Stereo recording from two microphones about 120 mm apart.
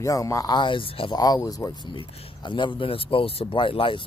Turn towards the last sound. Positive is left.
turn(degrees=45)  # may be behind; listen again after turning